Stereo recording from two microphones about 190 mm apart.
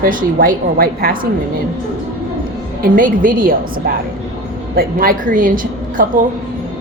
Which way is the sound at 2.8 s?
45° right (ahead or behind).